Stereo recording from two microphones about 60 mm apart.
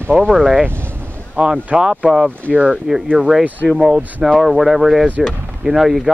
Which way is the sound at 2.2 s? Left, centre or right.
Left.